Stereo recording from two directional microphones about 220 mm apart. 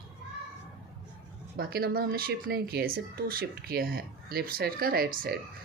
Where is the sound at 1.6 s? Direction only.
45° right (ahead or behind).